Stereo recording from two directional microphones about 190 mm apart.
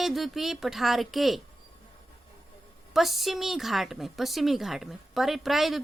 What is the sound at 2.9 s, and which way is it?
A woman's voice, centre (ahead or behind).